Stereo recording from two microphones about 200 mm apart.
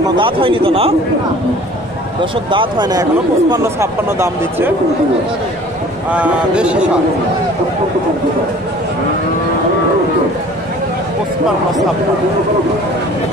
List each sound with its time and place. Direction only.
0.2 s a man's voice: 25° right (ahead or behind)
2.5 s speech: 20° right (ahead or behind)
6.0 s speech: 5° right (ahead or behind)